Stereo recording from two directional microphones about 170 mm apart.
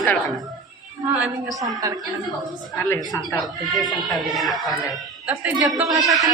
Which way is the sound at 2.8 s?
10° left (ahead or behind).